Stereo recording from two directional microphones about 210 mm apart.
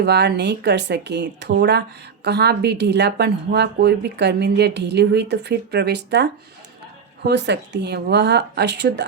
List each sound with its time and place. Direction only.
0.0 s a woman's voice: 55° right (ahead or behind)